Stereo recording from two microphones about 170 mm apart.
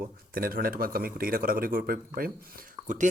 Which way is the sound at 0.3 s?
60° right (ahead or behind).